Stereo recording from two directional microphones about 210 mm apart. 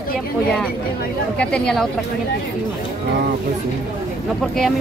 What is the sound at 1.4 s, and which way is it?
Speech, 5° left (ahead or behind).